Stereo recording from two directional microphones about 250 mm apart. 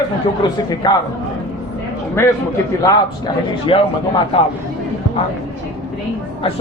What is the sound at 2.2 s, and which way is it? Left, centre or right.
Speech, centre.